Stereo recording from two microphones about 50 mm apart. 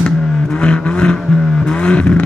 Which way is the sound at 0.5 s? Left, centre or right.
Left.